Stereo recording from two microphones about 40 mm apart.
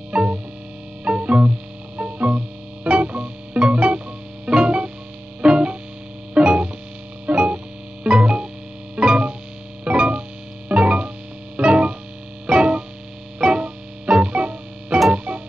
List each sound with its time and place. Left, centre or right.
0.1 s music: right